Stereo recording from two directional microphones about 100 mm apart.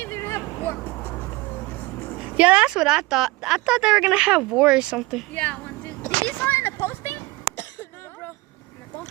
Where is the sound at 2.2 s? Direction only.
10° right (ahead or behind).